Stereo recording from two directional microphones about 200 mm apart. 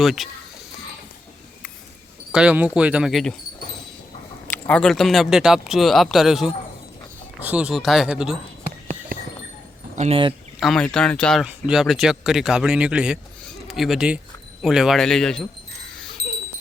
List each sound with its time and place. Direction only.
0.0 s speech: centre (ahead or behind)
2.3 s speech: 5° right (ahead or behind)
4.4 s speech: 10° left (ahead or behind)
9.9 s speech: 35° right (ahead or behind)
10.6 s speech: 5° left (ahead or behind)